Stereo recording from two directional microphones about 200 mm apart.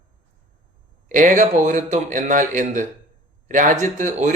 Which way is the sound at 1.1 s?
40° right (ahead or behind).